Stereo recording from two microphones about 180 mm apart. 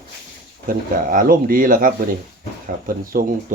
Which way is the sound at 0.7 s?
50° right (ahead or behind).